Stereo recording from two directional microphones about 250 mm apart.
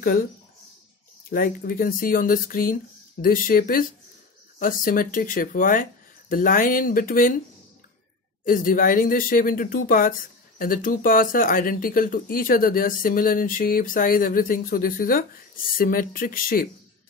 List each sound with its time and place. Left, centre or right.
1.3 s speech: left
8.5 s speech: left